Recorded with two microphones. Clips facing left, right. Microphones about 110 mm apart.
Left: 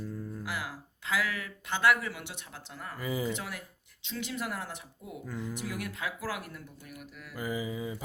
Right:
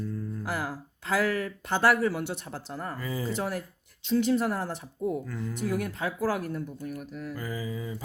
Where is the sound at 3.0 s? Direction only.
15° left (ahead or behind).